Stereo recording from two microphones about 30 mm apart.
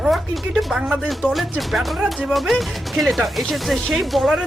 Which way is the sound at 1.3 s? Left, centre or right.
Centre.